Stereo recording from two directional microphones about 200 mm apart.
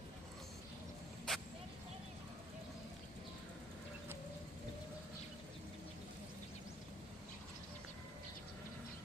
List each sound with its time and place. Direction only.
1.3 s vehicle: 5° left (ahead or behind)